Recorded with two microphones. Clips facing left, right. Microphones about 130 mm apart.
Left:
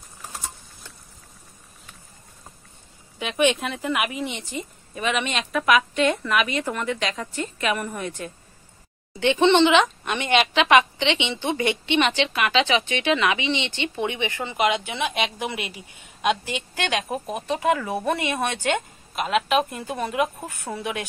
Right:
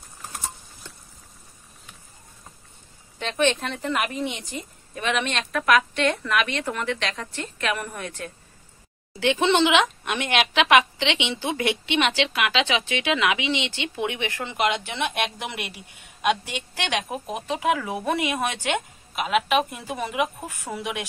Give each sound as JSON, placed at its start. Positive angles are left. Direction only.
{"t": 3.2, "sound": "a woman's voice", "side_deg": 10}
{"t": 15.6, "sound": "a man's voice", "side_deg": -65}
{"t": 16.2, "sound": "a woman's voice", "side_deg": -5}